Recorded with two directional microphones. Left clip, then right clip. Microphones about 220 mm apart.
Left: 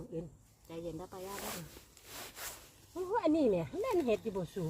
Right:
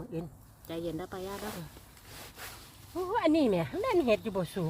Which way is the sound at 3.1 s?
20° right (ahead or behind).